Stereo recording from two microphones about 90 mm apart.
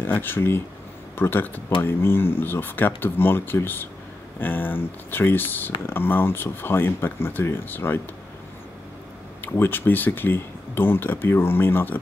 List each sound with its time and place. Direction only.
0.0 s speech: 25° left (ahead or behind)
9.4 s speech: 20° left (ahead or behind)